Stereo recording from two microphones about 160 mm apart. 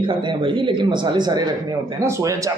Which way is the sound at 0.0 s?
30° right (ahead or behind).